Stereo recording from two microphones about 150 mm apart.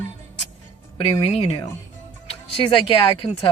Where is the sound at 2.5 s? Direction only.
35° left (ahead or behind).